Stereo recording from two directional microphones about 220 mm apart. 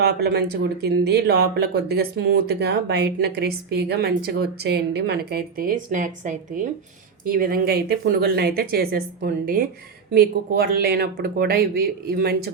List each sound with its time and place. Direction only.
0.0 s speech: 45° right (ahead or behind)